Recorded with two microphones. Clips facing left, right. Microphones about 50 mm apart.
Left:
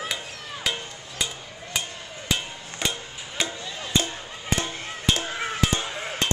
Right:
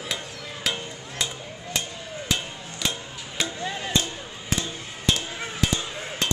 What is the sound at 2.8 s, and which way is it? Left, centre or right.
Music, centre.